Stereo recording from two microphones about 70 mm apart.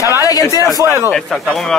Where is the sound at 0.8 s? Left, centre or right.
Right.